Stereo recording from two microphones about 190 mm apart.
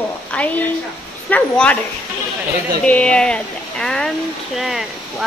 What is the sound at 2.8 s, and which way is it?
Speech, 5° left (ahead or behind).